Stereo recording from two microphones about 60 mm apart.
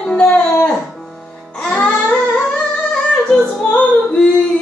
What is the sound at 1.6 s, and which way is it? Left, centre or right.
Child singing, centre.